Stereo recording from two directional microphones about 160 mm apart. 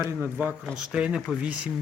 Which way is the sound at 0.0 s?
15° right (ahead or behind).